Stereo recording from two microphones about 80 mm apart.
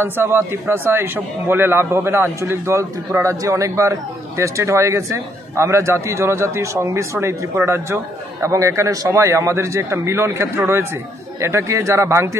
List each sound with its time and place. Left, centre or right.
0.0 s a man's voice: right